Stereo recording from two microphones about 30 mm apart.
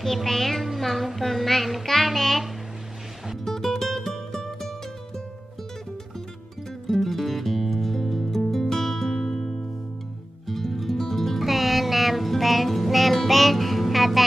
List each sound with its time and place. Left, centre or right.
0.0 s a child's voice: centre
1.0 s child singing: centre
3.4 s music: centre
6.9 s music: centre
9.1 s music: left
10.4 s music: centre